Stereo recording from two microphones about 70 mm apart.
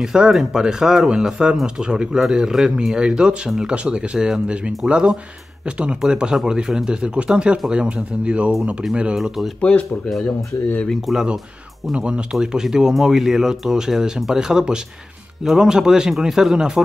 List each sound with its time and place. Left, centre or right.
0.0 s speech: centre
9.6 s speech: centre
10.9 s speech: centre
11.9 s speech: centre